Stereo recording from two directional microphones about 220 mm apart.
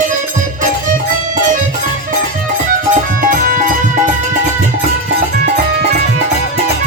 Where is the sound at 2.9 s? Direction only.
40° right (ahead or behind).